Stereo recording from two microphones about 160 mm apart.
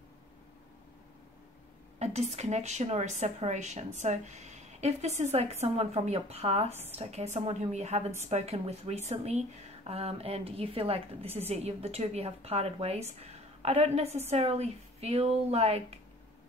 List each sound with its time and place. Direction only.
2.0 s a woman's voice: 45° right (ahead or behind)